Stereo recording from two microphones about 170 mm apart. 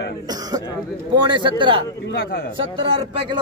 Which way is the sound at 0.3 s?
20° right (ahead or behind).